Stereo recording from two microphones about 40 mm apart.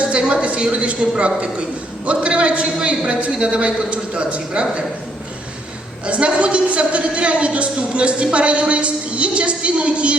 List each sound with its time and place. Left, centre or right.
0.0 s a sound: right
0.4 s a woman's voice: right
6.1 s a woman's voice: right